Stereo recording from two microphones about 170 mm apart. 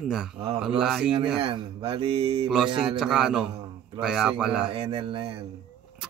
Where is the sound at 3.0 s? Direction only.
5° right (ahead or behind).